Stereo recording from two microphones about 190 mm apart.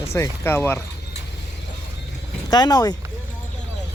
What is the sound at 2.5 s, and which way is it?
Speech, 20° left (ahead or behind).